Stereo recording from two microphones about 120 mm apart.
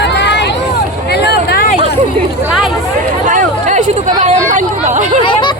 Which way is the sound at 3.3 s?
90° right.